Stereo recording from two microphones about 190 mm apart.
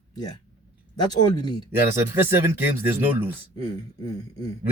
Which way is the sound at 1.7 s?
10° right (ahead or behind).